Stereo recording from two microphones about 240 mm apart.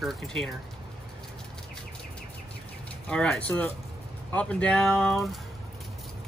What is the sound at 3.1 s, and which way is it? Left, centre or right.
Speech, centre.